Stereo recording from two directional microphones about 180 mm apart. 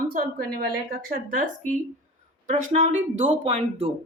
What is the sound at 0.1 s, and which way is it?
Speech, 55° right (ahead or behind).